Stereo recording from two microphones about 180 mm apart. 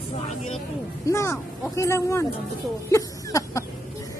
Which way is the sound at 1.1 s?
15° left (ahead or behind).